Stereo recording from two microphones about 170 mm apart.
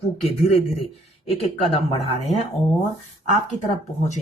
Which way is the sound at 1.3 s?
35° left (ahead or behind).